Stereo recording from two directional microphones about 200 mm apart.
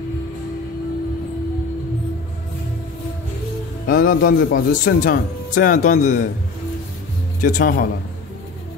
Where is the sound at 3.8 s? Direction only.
45° left (ahead or behind).